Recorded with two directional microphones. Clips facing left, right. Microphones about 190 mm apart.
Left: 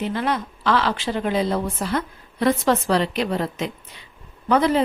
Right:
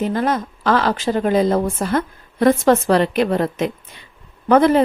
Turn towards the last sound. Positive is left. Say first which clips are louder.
# right 5 dB
turn(degrees=-50)  # may be behind; listen again after turning